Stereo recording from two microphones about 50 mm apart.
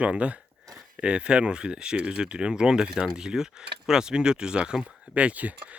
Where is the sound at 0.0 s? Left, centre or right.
Right.